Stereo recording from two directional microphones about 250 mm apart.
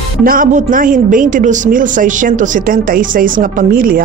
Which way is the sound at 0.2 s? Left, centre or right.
Right.